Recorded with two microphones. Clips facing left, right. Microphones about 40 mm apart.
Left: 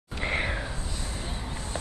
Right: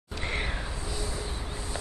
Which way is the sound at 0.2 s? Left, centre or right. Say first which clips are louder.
Left 4 dB; centre.